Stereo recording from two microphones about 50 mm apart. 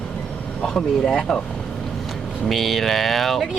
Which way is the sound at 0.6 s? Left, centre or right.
Centre.